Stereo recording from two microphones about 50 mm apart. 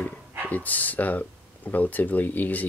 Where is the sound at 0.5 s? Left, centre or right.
Left.